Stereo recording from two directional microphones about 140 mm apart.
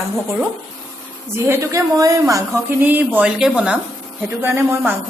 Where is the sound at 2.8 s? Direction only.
10° right (ahead or behind).